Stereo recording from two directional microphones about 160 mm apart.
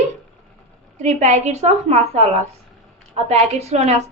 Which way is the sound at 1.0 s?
45° right (ahead or behind).